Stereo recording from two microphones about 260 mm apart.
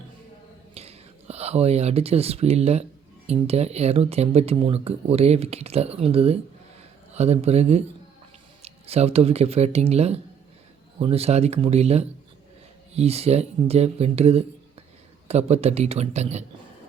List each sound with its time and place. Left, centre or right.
0.7 s speech: right